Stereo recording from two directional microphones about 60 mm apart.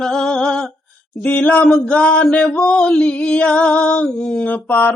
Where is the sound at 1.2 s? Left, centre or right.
Left.